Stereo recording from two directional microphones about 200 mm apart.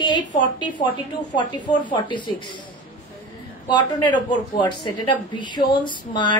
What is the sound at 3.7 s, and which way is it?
A woman's voice, 25° left (ahead or behind).